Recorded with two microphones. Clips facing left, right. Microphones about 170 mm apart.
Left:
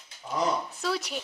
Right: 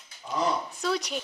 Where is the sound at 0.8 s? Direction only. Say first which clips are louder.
Right 3 dB; 5° left (ahead or behind).